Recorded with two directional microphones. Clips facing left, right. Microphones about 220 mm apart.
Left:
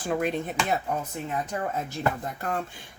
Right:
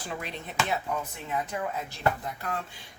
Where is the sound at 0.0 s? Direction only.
50° left (ahead or behind).